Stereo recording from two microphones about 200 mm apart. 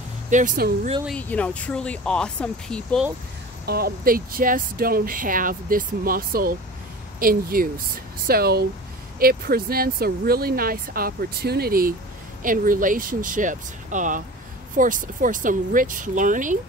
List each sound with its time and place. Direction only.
0.3 s speech: 40° right (ahead or behind)
1.0 s speech: 5° left (ahead or behind)
3.6 s speech: 50° right (ahead or behind)